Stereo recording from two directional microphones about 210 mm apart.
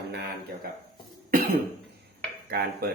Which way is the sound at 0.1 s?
50° right (ahead or behind).